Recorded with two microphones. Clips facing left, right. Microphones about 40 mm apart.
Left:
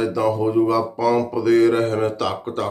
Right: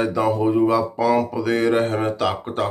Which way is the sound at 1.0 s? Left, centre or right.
Centre.